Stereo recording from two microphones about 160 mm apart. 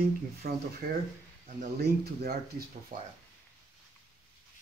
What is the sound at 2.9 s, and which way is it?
Speech, 55° right (ahead or behind).